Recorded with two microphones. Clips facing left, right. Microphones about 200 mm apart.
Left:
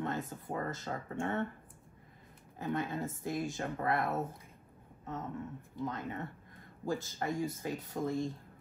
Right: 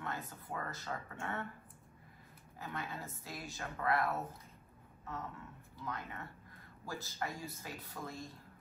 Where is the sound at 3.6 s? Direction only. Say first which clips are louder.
Left 3 dB; 25° left (ahead or behind).